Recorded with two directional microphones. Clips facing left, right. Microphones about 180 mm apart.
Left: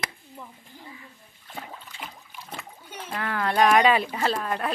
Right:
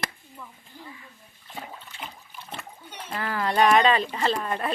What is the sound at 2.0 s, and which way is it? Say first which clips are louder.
Splash: right 2 dB; 10° left (ahead or behind).